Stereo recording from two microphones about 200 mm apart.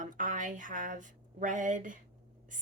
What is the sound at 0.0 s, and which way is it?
A woman's voice, 40° right (ahead or behind).